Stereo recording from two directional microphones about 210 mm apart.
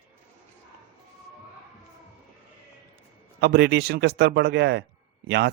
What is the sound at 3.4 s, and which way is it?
Speech, 50° right (ahead or behind).